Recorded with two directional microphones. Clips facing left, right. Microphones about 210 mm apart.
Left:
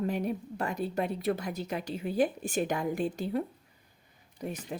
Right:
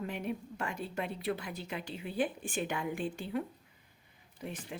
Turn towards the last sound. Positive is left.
turn(degrees=40)  # may be behind; listen again after turning